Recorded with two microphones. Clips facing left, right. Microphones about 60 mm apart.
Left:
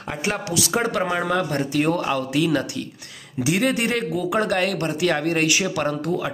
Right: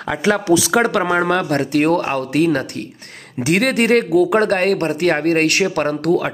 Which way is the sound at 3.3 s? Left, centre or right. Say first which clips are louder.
Right 5 dB; right.